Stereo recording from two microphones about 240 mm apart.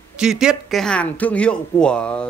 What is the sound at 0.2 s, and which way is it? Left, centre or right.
Speech, centre.